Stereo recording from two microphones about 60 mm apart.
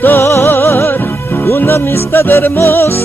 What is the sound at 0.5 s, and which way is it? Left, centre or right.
Music, left.